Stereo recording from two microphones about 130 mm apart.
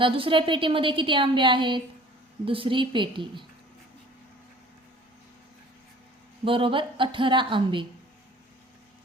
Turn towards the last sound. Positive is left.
turn(degrees=-40)  # may be behind; listen again after turning